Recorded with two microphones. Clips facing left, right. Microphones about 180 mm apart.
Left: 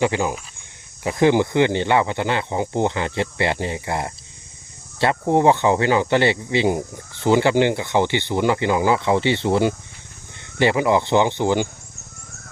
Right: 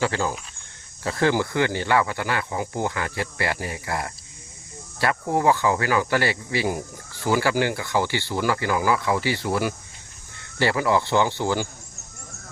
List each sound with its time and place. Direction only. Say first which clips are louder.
0.0 s speech: left 4 dB; 15° left (ahead or behind)